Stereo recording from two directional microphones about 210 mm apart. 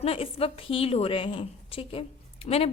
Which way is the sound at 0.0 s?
30° left (ahead or behind).